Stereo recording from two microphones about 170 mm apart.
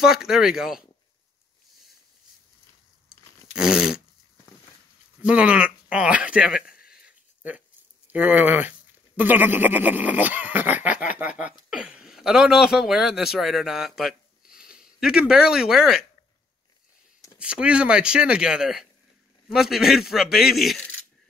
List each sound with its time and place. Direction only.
0.0 s speech: 5° right (ahead or behind)
3.1 s a sound: 5° right (ahead or behind)
5.2 s speech: 5° right (ahead or behind)
6.7 s a sound: 60° left (ahead or behind)
8.1 s a man's voice: 10° right (ahead or behind)
17.4 s speech: 5° right (ahead or behind)